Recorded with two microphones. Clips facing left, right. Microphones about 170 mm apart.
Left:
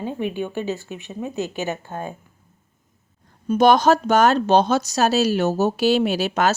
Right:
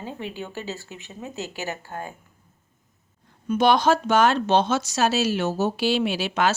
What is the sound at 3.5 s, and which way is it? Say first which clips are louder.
Speech: left 4 dB; 45° left (ahead or behind).